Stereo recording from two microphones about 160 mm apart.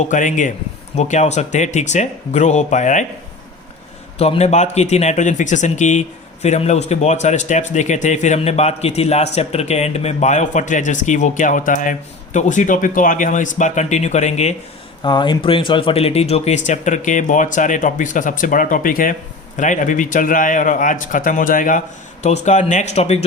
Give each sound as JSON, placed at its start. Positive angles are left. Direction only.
{"t": 0.1, "sound": "speech", "side_deg": 50}
{"t": 4.2, "sound": "speech", "side_deg": 40}
{"t": 15.0, "sound": "a man's voice", "side_deg": 30}